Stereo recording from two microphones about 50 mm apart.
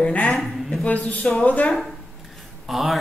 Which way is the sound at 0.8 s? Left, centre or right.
Left.